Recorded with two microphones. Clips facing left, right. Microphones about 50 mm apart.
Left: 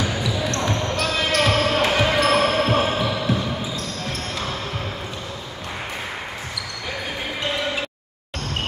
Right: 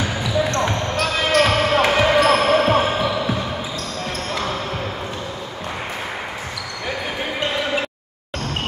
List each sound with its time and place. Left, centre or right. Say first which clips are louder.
0.2 s basketball bounce: right 4 dB; right; by 2.5 s centre
2.5 s basketball bounce: right 4 dB; right